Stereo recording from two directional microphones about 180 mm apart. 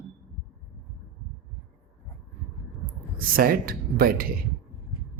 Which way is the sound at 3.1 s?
55° right (ahead or behind).